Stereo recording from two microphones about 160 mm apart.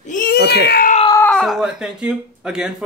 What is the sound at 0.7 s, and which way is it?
Speech, 65° left (ahead or behind).